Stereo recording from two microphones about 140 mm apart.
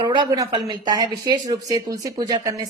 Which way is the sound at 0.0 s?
35° right (ahead or behind).